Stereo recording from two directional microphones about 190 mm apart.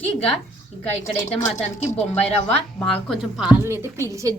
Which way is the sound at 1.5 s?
10° left (ahead or behind).